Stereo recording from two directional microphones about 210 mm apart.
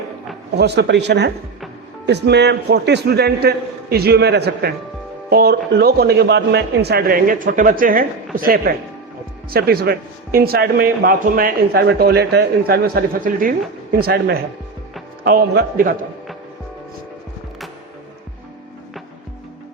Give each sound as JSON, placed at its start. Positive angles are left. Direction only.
{"t": 0.5, "sound": "a man's voice", "side_deg": -55}
{"t": 14.0, "sound": "a man's voice", "side_deg": -55}